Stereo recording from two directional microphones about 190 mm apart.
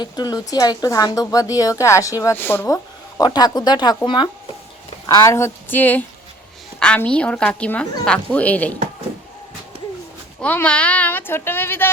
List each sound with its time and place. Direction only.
0.0 s a woman's voice: 20° left (ahead or behind)
10.4 s speech: 5° left (ahead or behind)